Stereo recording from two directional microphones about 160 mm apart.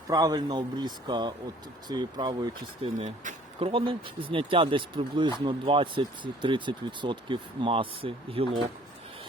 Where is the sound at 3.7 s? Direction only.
30° right (ahead or behind).